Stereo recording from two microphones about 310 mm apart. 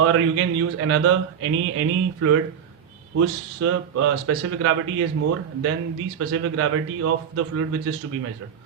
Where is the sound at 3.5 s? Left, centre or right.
Right.